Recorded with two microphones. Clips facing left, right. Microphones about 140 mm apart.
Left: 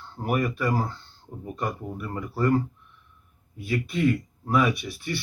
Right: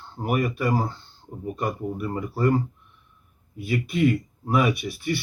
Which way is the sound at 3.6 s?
15° right (ahead or behind).